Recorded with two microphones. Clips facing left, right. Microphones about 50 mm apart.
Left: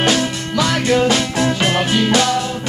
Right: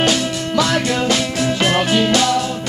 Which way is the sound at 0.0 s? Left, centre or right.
Left.